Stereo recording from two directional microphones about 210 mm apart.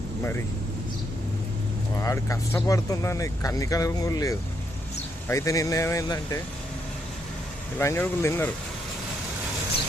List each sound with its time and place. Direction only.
0.2 s speech: 10° left (ahead or behind)
2.0 s speech: 15° left (ahead or behind)
7.8 s speech: 10° left (ahead or behind)